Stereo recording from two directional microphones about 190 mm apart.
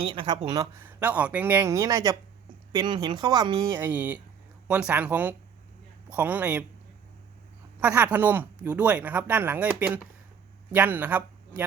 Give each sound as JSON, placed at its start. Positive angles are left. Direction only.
{"t": 0.0, "sound": "speech", "side_deg": -25}
{"t": 3.8, "sound": "speech", "side_deg": -10}
{"t": 7.8, "sound": "speech", "side_deg": -5}